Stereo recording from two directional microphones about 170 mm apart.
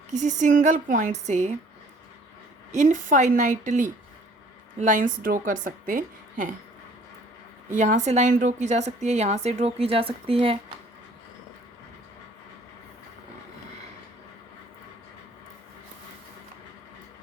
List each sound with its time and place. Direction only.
0.1 s a woman's voice: 45° right (ahead or behind)
2.7 s a woman's voice: 45° right (ahead or behind)
7.8 s a woman's voice: 45° right (ahead or behind)